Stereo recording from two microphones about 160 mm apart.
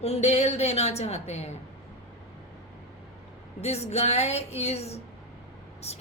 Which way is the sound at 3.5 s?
40° left (ahead or behind).